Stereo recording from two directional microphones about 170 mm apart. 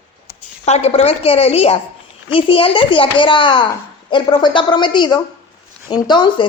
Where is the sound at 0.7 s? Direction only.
40° left (ahead or behind).